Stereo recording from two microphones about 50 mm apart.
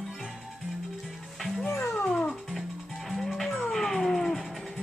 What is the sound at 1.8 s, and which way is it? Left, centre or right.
Music, left.